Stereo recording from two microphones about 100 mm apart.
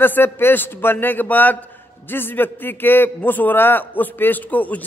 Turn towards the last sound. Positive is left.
turn(degrees=15)  # may be behind; listen again after turning